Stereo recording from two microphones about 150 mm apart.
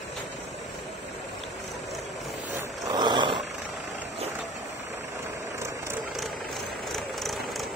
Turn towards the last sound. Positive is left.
turn(degrees=0)  # may be behind; listen again after turning